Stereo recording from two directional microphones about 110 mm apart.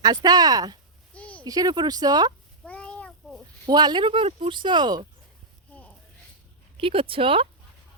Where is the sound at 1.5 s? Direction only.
35° right (ahead or behind).